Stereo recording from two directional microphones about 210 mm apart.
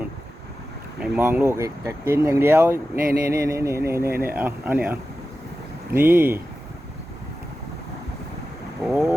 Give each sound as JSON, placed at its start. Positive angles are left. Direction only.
{"t": 0.9, "sound": "speech", "side_deg": -5}
{"t": 8.8, "sound": "speech", "side_deg": -5}